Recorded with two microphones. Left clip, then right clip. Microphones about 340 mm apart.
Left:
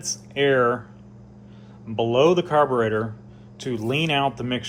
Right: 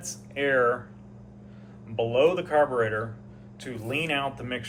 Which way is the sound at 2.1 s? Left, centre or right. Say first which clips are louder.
Left 4 dB; centre.